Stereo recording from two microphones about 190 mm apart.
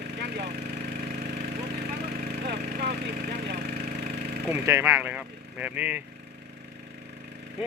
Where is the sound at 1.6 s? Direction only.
55° right (ahead or behind).